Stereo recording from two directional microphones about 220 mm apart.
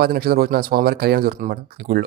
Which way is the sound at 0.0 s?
45° right (ahead or behind).